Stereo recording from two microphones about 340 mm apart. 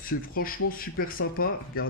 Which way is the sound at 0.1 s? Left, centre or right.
Left.